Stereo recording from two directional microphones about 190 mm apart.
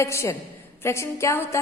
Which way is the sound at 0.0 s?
15° left (ahead or behind).